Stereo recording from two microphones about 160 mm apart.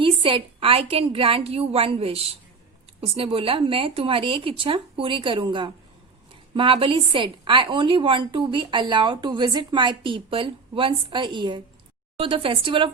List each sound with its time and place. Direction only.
0.0 s a woman's voice: 35° right (ahead or behind)